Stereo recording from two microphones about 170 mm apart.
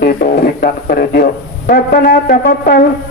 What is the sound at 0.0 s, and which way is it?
A man's voice, 60° left (ahead or behind).